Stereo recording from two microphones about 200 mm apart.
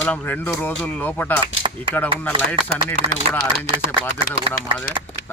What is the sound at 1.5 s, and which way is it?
Cutlery, 75° left (ahead or behind).